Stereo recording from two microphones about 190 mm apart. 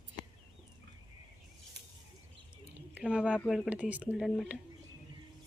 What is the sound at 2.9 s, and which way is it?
Speech, 5° right (ahead or behind).